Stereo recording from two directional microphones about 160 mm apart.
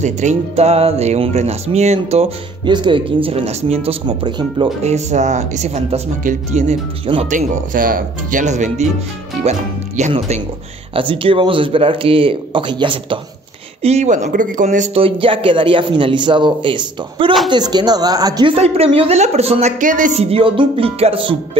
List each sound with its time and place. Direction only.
0.0 s speech: 45° right (ahead or behind); by 4.6 s 30° right (ahead or behind)
4.8 s speech: 45° right (ahead or behind)
7.2 s speech: 55° right (ahead or behind)
11.0 s speech: 35° right (ahead or behind)
13.8 s speech: 45° right (ahead or behind)
15.0 s speech: 35° right (ahead or behind)
19.8 s speech: 55° right (ahead or behind)
20.2 s speech: 35° right (ahead or behind)